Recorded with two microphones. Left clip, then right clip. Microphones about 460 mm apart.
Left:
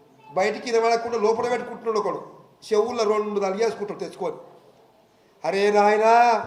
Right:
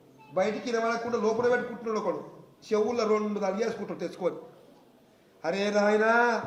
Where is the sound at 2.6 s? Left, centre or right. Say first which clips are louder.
Left 5 dB; centre.